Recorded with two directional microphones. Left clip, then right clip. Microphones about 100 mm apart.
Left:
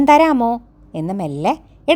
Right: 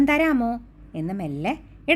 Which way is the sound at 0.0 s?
60° left (ahead or behind).